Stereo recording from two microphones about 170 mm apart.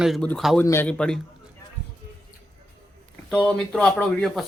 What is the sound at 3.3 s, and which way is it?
Speech, 5° left (ahead or behind).